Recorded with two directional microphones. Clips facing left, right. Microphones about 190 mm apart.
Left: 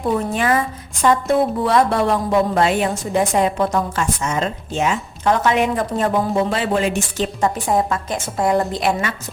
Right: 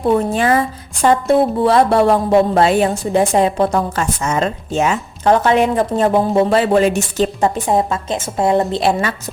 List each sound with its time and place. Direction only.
0.0 s a woman's voice: 30° right (ahead or behind)
7.7 s a woman's voice: 25° right (ahead or behind)